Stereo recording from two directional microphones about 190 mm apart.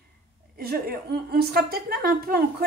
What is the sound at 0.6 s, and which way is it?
Speech, 55° right (ahead or behind).